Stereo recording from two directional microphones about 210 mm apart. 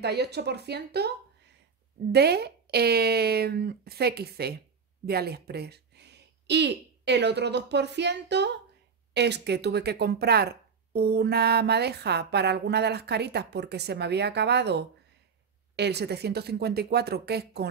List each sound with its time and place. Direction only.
0.0 s speech: 50° right (ahead or behind)
2.1 s speech: 50° right (ahead or behind)